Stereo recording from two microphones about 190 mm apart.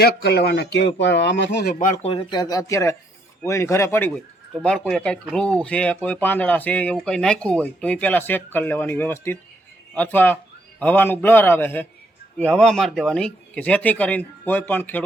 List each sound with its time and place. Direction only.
0.0 s speech: 60° left (ahead or behind)
1.8 s speech: 35° left (ahead or behind); by 15.0 s 10° left (ahead or behind)